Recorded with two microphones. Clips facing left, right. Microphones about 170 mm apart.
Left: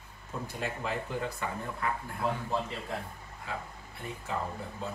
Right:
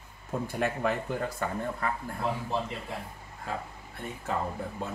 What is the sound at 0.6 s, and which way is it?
Speech, 55° right (ahead or behind).